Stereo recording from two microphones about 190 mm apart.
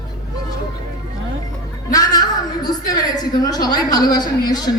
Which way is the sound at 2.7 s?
20° left (ahead or behind).